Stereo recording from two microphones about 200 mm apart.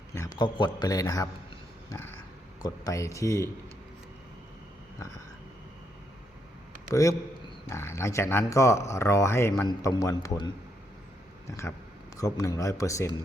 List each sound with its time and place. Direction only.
0.1 s a man's voice: 15° left (ahead or behind)
1.9 s a sound: 10° left (ahead or behind)
2.6 s speech: 20° left (ahead or behind)
6.9 s speech: 15° left (ahead or behind)